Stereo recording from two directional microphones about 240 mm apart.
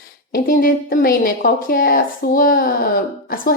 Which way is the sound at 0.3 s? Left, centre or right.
Left.